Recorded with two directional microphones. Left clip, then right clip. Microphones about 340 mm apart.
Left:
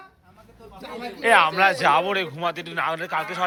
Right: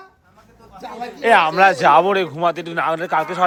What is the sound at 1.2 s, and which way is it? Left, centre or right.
Speech, centre.